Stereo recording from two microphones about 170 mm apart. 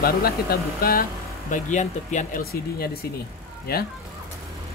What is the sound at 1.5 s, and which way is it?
Speech, 45° left (ahead or behind).